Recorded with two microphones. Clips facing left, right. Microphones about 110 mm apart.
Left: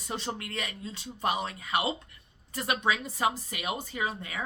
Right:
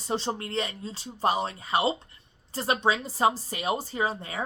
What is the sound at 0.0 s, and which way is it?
Speech, 30° right (ahead or behind).